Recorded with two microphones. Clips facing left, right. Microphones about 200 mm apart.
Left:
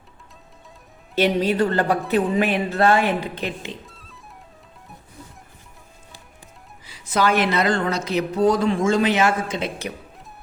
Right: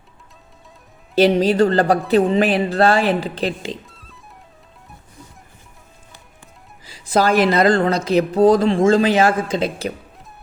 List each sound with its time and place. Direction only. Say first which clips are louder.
1.1 s speech: right 5 dB; 30° right (ahead or behind)
3.8 s music: even; centre (ahead or behind)
6.8 s speech: right 4 dB; 35° right (ahead or behind)